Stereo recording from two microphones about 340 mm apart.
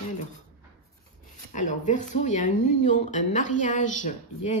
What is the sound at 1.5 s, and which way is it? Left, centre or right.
Speech, left.